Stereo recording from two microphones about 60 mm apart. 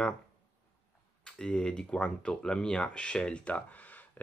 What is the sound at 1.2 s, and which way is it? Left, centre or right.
Speech, centre.